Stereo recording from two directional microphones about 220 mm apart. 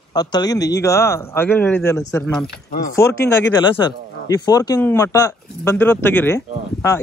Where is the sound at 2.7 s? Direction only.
40° left (ahead or behind).